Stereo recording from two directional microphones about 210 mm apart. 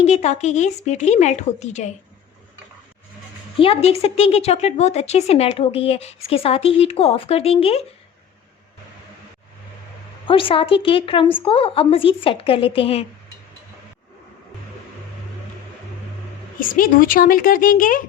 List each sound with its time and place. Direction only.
0.0 s a woman's voice: 30° left (ahead or behind)
3.6 s a woman's voice: 30° left (ahead or behind)
10.2 s a woman's voice: 25° left (ahead or behind)
16.6 s a woman's voice: 40° left (ahead or behind)